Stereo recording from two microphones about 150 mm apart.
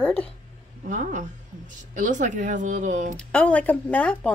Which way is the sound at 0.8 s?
55° right (ahead or behind).